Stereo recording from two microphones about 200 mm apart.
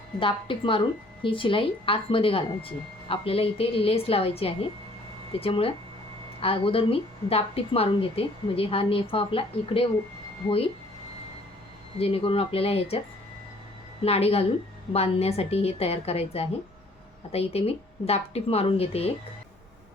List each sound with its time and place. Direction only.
0.2 s a woman's voice: 25° left (ahead or behind)
11.9 s a woman's voice: 30° left (ahead or behind)
14.0 s a woman's voice: 30° left (ahead or behind)